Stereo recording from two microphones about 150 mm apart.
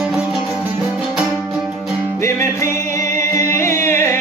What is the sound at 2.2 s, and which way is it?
Music, 20° left (ahead or behind).